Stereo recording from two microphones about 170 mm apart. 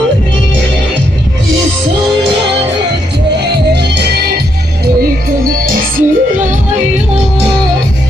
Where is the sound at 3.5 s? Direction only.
75° right (ahead or behind).